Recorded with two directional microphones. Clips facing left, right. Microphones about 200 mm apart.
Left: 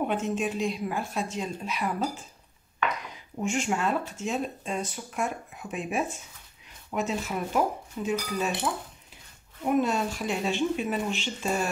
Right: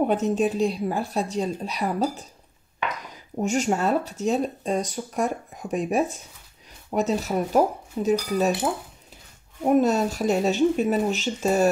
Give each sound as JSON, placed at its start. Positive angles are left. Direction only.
{"t": 0.0, "sound": "a woman's voice", "side_deg": -40}
{"t": 3.3, "sound": "a woman's voice", "side_deg": -40}
{"t": 9.6, "sound": "a woman's voice", "side_deg": -40}